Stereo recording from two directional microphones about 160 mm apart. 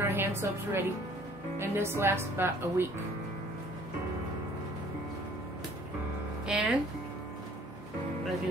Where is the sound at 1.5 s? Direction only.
15° right (ahead or behind).